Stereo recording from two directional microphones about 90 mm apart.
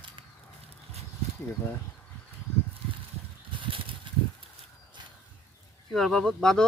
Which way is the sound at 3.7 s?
80° right.